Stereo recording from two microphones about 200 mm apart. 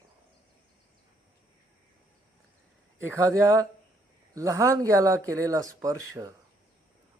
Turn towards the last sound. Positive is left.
turn(degrees=-15)  # may be behind; listen again after turning